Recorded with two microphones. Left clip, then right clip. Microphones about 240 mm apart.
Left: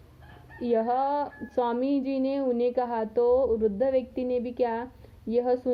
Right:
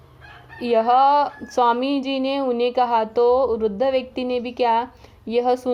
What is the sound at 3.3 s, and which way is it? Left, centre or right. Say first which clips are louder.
Music: right 5 dB; right.